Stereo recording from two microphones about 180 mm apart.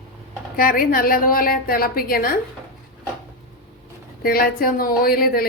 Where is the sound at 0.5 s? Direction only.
50° left (ahead or behind).